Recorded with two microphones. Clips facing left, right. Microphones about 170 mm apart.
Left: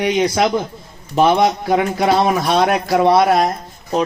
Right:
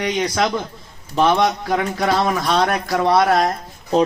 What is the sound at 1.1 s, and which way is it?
Speech, 15° left (ahead or behind).